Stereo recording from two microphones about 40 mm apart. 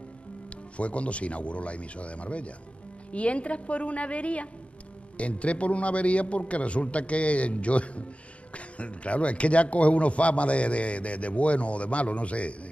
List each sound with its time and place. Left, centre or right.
0.7 s a man's voice: left